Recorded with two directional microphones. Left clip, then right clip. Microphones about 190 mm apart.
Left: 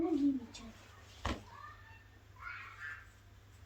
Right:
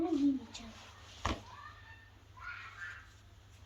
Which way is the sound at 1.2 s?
5° right (ahead or behind).